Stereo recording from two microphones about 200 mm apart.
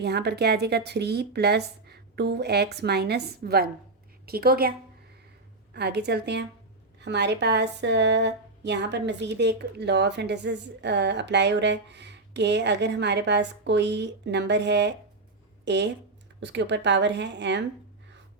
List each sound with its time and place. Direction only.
0.0 s a woman's voice: 55° right (ahead or behind)
5.7 s speech: 55° right (ahead or behind)